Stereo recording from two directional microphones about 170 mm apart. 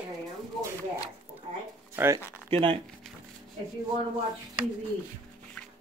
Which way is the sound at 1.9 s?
15° right (ahead or behind).